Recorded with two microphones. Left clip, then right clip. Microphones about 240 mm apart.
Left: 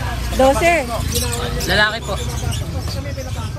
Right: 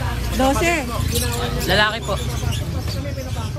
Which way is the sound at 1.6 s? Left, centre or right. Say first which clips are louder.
Left 2 dB; right.